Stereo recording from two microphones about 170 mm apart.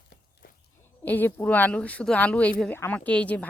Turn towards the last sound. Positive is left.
turn(degrees=5)  # may be behind; listen again after turning